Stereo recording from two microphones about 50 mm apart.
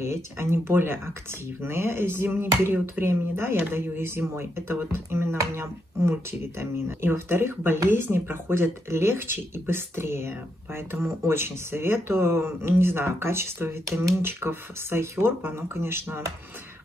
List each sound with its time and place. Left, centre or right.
0.0 s speech: right
6.6 s speech: right